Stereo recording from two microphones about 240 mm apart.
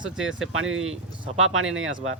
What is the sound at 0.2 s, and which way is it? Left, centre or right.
Speech, right.